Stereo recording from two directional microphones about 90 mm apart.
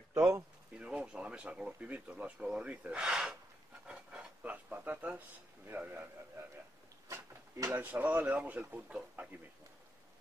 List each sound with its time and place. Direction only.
0.7 s speech: 10° right (ahead or behind)
3.8 s a sound: 10° right (ahead or behind)
5.7 s a man's voice: 20° right (ahead or behind)